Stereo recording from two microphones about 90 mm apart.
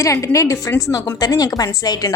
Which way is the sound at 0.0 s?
35° left (ahead or behind).